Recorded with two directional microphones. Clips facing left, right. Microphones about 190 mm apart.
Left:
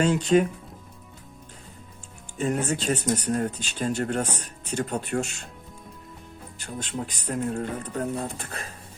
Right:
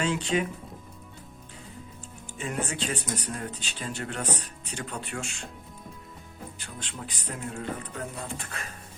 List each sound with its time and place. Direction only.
0.0 s speech: 40° left (ahead or behind)
2.4 s speech: 40° left (ahead or behind)
6.6 s speech: 45° left (ahead or behind)